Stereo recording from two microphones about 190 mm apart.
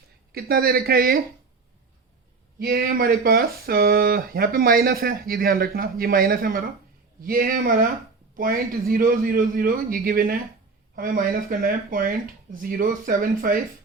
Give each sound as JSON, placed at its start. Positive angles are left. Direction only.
{"t": 0.3, "sound": "speech", "side_deg": -50}
{"t": 2.6, "sound": "speech", "side_deg": -50}